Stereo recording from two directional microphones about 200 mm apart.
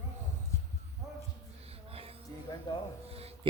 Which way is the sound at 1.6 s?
30° right (ahead or behind).